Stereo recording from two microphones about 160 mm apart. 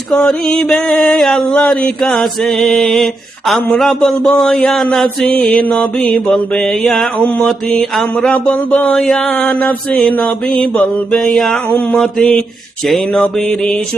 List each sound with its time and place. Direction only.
0.1 s mantra: 5° left (ahead or behind)